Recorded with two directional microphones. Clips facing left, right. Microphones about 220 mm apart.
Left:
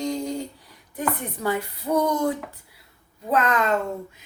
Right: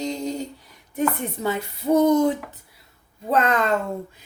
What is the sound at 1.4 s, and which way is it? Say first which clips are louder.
Speech: right 2 dB; 25° right (ahead or behind).